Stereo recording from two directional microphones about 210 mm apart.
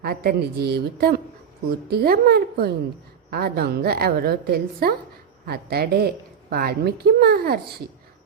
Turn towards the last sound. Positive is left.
turn(degrees=-45)  # may be behind; listen again after turning